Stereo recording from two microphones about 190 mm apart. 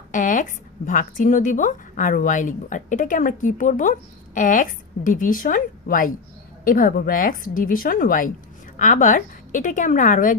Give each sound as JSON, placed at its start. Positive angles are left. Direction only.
{"t": 0.1, "sound": "speech", "side_deg": 45}